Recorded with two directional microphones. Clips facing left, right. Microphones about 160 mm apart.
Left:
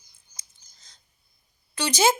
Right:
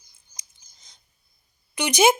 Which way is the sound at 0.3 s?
15° right (ahead or behind).